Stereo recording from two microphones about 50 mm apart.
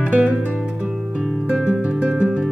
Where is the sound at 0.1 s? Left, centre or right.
Right.